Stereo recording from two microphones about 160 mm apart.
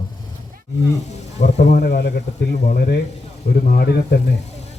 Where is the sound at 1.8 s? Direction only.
85° left.